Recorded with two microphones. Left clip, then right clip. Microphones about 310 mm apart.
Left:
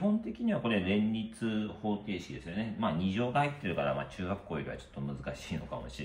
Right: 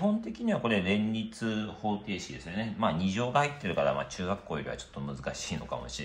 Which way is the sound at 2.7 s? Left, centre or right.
Centre.